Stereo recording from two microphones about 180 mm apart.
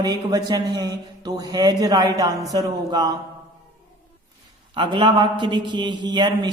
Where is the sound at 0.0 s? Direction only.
20° right (ahead or behind).